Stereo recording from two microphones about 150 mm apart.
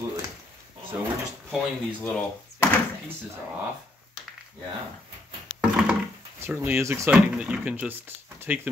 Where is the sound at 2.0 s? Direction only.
5° left (ahead or behind).